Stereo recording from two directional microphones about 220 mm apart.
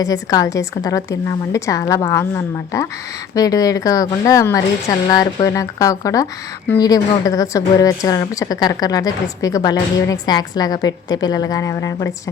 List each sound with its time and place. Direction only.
0.0 s a woman's voice: 15° left (ahead or behind)